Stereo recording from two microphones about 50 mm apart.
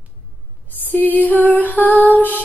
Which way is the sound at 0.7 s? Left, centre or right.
Left.